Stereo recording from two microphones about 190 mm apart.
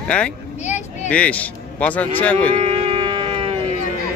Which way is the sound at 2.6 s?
35° right (ahead or behind).